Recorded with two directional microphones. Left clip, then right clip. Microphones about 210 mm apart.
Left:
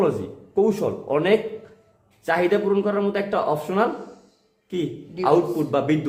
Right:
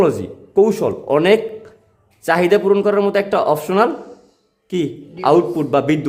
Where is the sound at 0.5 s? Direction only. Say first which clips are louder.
Right 6 dB; 45° right (ahead or behind).